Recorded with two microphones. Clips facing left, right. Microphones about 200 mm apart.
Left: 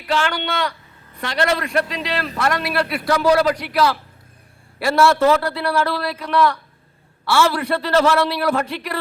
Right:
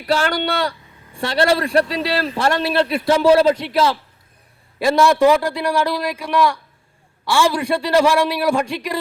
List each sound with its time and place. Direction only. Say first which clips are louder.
0.0 s a man's voice: right 3 dB; 40° right (ahead or behind); by 9.0 s 15° right (ahead or behind)